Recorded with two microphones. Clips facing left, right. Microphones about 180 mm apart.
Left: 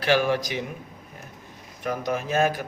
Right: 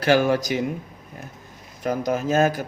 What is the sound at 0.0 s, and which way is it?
Speech, 45° right (ahead or behind).